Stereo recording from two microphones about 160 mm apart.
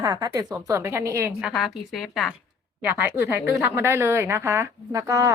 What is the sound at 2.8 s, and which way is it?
A woman's voice, 10° right (ahead or behind).